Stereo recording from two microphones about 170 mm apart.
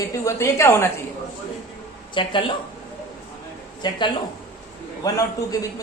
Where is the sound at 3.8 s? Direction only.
25° left (ahead or behind).